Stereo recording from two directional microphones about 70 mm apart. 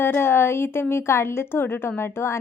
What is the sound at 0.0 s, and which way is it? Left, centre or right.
A woman's voice, left.